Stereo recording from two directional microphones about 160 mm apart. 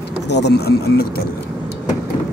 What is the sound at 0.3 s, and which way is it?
Speech, 90° left.